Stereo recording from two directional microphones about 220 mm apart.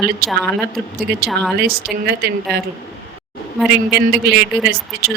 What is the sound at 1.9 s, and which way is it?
Speech, 5° right (ahead or behind).